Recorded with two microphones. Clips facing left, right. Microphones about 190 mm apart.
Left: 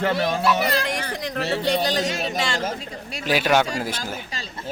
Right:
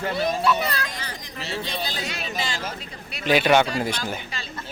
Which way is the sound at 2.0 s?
45° left (ahead or behind).